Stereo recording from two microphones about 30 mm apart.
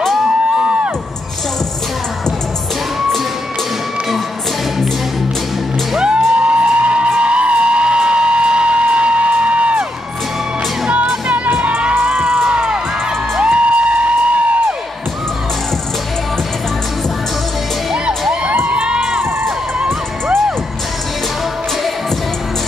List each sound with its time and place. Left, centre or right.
5.9 s music: right
6.4 s music: right
10.9 s music: right
13.4 s music: right
18.5 s children shouting: right